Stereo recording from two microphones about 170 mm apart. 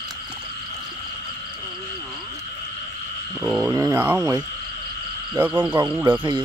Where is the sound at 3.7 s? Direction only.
15° right (ahead or behind).